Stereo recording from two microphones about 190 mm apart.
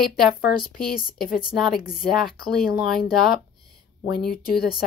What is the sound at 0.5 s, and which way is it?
Speech, 50° left (ahead or behind).